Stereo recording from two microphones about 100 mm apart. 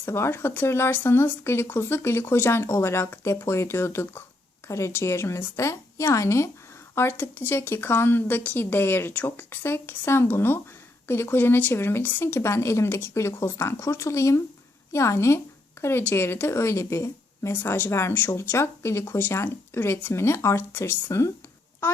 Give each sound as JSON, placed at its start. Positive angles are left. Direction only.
{"t": 0.0, "sound": "speech", "side_deg": 25}